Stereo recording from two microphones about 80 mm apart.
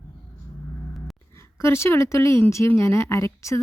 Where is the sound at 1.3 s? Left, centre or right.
Left.